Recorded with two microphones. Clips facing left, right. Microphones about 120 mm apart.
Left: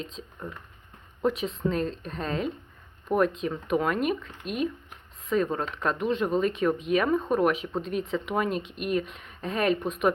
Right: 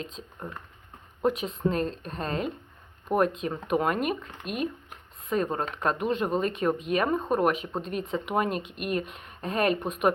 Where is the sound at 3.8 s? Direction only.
45° right (ahead or behind).